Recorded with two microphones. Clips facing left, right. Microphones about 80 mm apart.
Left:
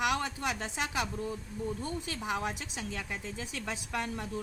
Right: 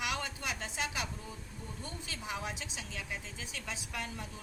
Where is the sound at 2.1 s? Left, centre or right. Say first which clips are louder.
Left 4 dB; left.